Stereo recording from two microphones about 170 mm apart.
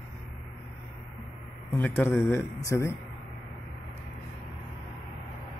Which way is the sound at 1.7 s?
10° left (ahead or behind).